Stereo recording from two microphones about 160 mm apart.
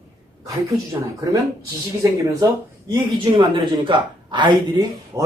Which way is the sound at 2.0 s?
20° right (ahead or behind).